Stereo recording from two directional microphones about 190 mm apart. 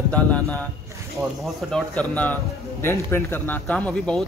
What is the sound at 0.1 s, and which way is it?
Speech, 5° left (ahead or behind).